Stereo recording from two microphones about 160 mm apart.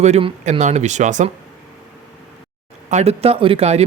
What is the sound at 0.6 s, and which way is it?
Speech, 45° right (ahead or behind).